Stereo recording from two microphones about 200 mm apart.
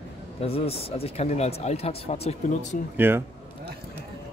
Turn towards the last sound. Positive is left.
turn(degrees=-10)  # may be behind; listen again after turning